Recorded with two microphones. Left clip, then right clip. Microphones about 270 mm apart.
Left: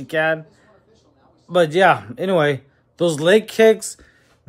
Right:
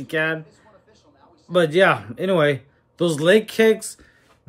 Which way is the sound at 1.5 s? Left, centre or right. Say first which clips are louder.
Left 2 dB; centre.